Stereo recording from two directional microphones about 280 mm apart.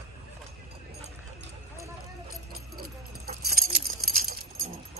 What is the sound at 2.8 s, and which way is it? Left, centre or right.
Keys jangling, right.